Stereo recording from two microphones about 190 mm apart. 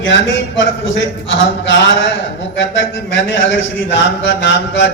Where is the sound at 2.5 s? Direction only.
75° left (ahead or behind).